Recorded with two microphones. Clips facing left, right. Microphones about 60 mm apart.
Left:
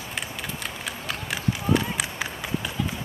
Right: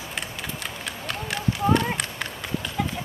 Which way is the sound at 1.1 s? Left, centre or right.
Centre.